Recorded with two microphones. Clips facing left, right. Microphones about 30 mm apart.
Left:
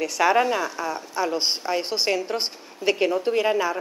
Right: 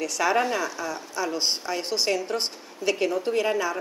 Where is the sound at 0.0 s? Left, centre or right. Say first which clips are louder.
Left 4 dB; centre.